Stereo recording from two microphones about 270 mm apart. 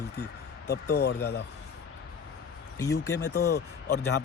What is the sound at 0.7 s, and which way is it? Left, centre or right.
Speech, left.